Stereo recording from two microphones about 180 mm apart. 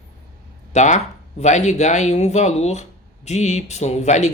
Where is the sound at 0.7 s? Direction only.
40° left (ahead or behind).